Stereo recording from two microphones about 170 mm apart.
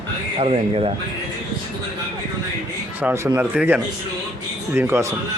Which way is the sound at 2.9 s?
15° right (ahead or behind).